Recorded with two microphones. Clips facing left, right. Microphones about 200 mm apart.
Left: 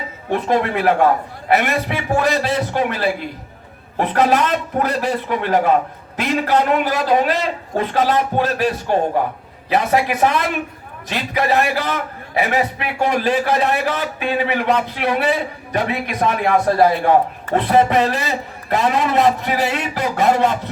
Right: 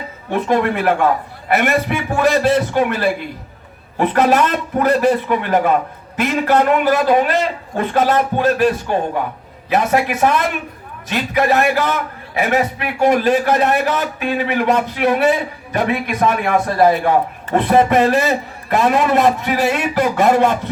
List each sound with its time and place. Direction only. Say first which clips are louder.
0.3 s a man's voice: right 2 dB; 50° right (ahead or behind)